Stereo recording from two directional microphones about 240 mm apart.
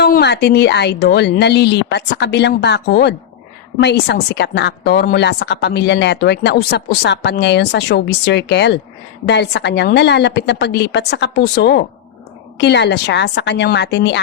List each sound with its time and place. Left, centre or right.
0.0 s a woman's voice: left